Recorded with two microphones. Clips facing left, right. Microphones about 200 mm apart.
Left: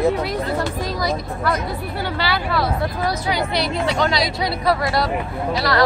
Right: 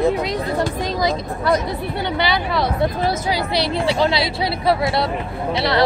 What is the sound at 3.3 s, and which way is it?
Speech, 30° right (ahead or behind).